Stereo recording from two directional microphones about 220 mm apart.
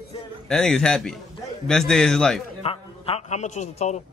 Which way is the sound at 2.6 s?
25° left (ahead or behind).